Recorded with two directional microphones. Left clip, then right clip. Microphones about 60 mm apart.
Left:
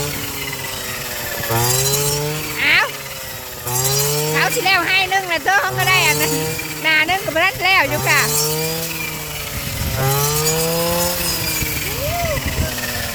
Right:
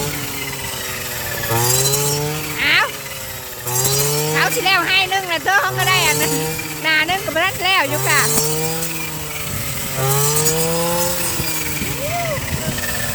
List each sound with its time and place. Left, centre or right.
1.5 s chainsaw: right
2.0 s vehicle: centre
2.6 s insect: centre
4.2 s speech: centre
10.7 s vehicle: centre